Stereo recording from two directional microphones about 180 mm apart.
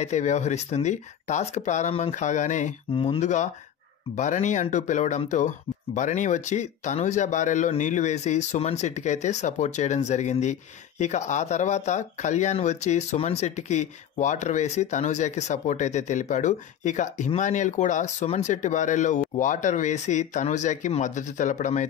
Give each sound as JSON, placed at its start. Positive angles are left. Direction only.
{"t": 0.0, "sound": "speech", "side_deg": 40}